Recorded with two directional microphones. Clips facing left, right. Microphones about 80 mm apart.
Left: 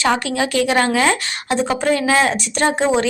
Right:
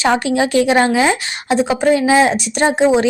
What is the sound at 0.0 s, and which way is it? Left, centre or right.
A woman's voice, right.